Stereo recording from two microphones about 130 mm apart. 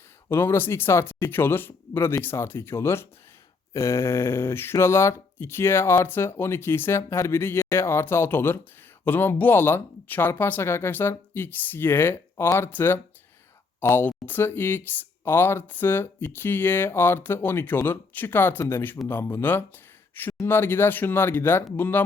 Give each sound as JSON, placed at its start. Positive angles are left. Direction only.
{"t": 0.3, "sound": "speech", "side_deg": 20}